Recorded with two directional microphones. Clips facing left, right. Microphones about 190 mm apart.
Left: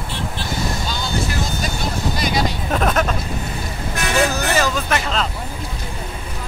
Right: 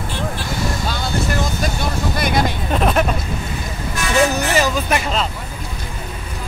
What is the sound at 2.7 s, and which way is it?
Vehicle, centre (ahead or behind).